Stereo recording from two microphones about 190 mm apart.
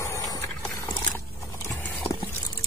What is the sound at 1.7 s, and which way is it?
Clip-clop, 10° left (ahead or behind).